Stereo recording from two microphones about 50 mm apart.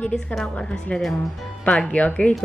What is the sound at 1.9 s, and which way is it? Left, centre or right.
Speech, left.